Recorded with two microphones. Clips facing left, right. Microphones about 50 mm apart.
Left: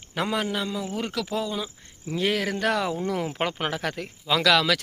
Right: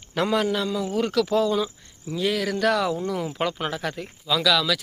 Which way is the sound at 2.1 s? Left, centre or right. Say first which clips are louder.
Right 1 dB; left.